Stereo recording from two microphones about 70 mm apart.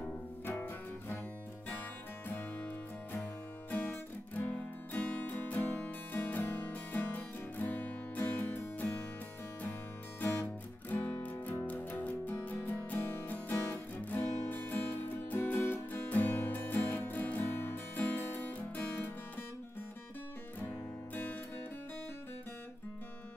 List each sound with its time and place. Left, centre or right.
0.0 s music: left
2.2 s music: left
10.2 s music: left
20.5 s music: left